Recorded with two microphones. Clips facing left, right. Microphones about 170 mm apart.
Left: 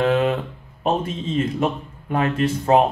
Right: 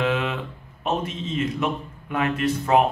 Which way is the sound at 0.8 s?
35° left (ahead or behind).